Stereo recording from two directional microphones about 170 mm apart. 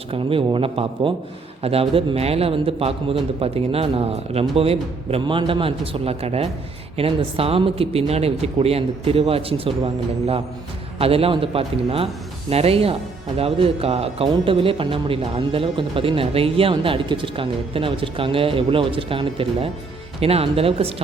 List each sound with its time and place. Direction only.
0.1 s speech: 30° right (ahead or behind)